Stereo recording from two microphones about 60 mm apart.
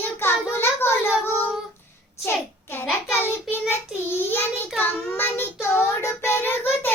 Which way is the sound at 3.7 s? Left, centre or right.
Left.